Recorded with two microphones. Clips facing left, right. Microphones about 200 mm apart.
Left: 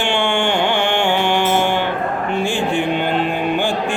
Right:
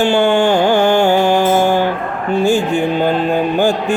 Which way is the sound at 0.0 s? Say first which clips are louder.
Right 7 dB; 40° right (ahead or behind).